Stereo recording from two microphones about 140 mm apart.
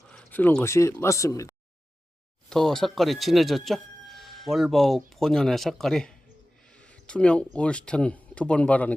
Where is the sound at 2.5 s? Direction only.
5° left (ahead or behind).